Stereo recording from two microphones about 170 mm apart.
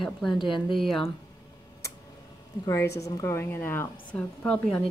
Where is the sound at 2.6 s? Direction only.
15° left (ahead or behind).